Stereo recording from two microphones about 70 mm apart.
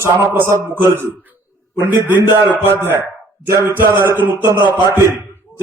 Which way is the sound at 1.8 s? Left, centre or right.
Right.